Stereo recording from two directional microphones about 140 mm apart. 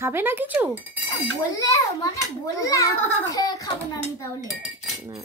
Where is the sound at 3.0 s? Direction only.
10° left (ahead or behind).